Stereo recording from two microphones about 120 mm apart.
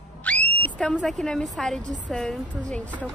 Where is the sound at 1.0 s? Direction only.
5° left (ahead or behind).